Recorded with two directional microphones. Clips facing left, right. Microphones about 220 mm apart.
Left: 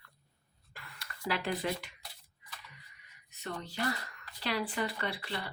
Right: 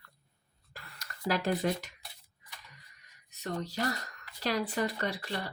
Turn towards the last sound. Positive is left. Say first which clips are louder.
# right 3 dB
turn(degrees=-40)  # may be behind; listen again after turning